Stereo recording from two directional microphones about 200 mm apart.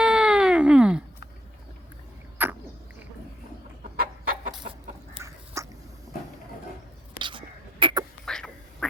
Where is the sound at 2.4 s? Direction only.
10° right (ahead or behind).